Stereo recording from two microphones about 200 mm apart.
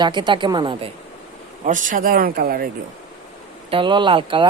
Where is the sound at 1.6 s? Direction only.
40° right (ahead or behind).